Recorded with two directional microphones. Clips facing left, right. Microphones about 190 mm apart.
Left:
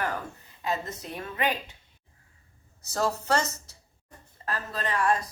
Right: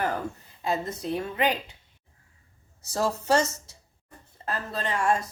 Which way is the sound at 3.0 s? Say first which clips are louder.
Right 3 dB; 25° right (ahead or behind).